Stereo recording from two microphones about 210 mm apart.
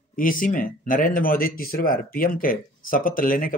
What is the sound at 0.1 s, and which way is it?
Speech, 40° left (ahead or behind).